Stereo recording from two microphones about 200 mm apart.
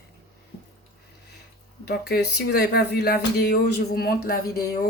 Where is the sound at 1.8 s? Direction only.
55° left (ahead or behind).